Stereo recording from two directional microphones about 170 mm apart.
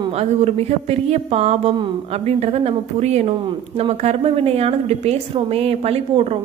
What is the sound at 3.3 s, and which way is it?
A woman's voice, 30° right (ahead or behind).